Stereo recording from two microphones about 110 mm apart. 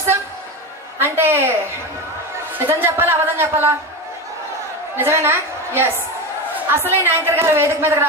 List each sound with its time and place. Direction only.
0.9 s a man's voice: 20° right (ahead or behind)
4.9 s a man's voice: 20° right (ahead or behind)
6.7 s a man's voice: 20° right (ahead or behind)